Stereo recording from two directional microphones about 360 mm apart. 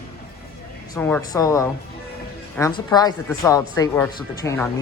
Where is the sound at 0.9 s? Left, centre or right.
Centre.